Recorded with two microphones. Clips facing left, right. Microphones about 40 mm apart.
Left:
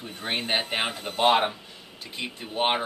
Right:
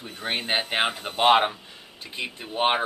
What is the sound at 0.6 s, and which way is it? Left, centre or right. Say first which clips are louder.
Speech: right 3 dB; right.